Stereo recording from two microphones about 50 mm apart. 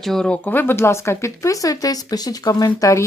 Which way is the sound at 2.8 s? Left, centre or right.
Left.